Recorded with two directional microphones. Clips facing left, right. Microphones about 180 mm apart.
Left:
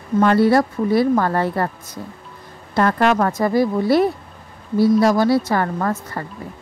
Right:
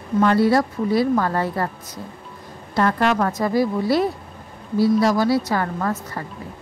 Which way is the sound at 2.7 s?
50° left (ahead or behind).